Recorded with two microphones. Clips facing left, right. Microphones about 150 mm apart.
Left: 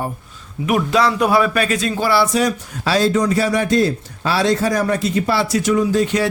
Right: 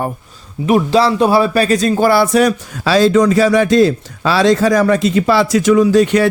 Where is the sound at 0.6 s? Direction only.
30° right (ahead or behind).